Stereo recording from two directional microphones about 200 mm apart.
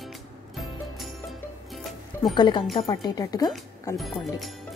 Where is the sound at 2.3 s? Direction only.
25° left (ahead or behind).